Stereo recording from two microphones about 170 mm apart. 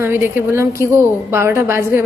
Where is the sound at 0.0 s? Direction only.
10° right (ahead or behind).